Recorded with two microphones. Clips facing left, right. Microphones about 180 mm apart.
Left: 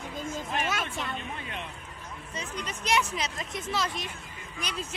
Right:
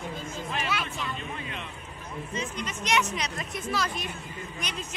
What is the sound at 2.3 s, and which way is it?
Speech, 35° left (ahead or behind).